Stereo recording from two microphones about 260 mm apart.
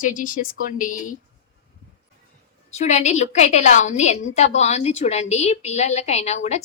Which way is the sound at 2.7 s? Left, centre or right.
Left.